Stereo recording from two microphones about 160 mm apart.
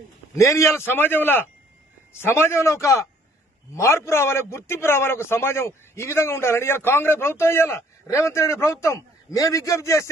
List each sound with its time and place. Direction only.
0.3 s a man's voice: 20° left (ahead or behind)